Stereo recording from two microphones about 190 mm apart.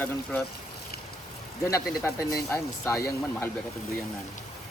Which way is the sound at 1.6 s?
15° left (ahead or behind).